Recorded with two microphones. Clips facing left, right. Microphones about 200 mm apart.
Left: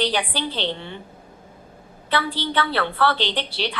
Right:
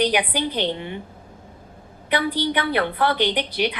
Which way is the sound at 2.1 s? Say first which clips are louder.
Right 2 dB; 15° right (ahead or behind).